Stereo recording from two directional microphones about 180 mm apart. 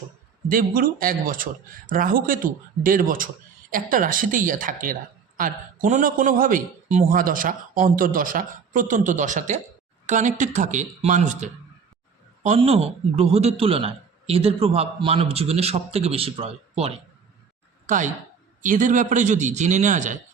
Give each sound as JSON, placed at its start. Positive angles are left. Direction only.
{"t": 0.4, "sound": "a man's voice", "side_deg": -50}
{"t": 17.8, "sound": "speech", "side_deg": -45}